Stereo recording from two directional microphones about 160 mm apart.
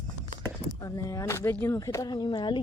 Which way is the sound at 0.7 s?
20° left (ahead or behind).